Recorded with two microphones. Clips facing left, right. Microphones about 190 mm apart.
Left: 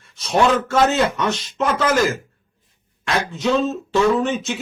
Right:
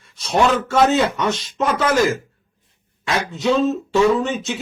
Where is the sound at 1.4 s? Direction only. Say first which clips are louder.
Even; centre (ahead or behind).